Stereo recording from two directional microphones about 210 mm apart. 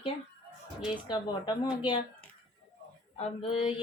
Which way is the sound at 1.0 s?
20° left (ahead or behind).